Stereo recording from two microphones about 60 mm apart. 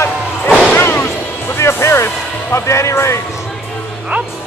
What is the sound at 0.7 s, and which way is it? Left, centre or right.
Music, left.